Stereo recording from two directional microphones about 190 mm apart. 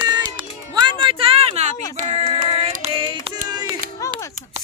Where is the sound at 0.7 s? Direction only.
25° right (ahead or behind).